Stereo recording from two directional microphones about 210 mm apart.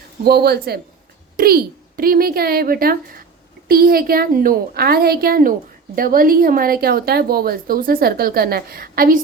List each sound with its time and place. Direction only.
0.3 s a woman's voice: 50° right (ahead or behind)